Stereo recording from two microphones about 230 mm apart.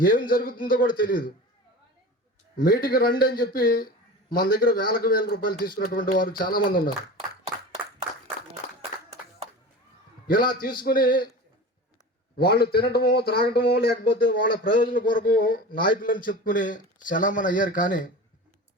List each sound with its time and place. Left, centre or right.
0.0 s a man's voice: left
2.6 s a man's voice: left
10.2 s a man's voice: left
12.4 s a man's voice: left